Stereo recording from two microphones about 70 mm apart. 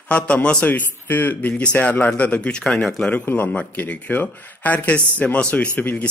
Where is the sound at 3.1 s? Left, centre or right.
Left.